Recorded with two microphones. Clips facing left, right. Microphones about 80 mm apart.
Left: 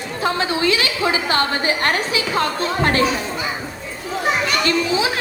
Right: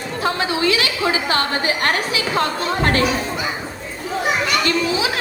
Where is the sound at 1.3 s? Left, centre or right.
Left.